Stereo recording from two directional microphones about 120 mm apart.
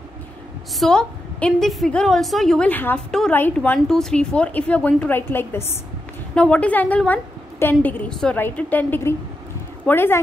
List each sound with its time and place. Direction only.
0.7 s a woman's voice: 5° left (ahead or behind)
2.7 s a woman's voice: 15° left (ahead or behind)
3.1 s a woman's voice: 5° left (ahead or behind)
3.3 s a woman's voice: 15° left (ahead or behind)
6.3 s a woman's voice: 10° left (ahead or behind)